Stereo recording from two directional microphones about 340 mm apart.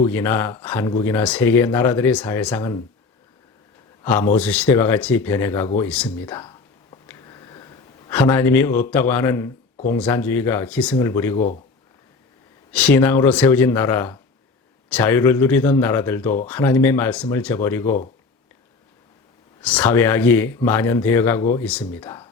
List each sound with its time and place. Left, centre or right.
0.1 s speech: centre
4.0 s a man's voice: centre
6.9 s a sound: centre
9.9 s speech: centre
11.3 s speech: left
12.7 s speech: centre
19.6 s speech: centre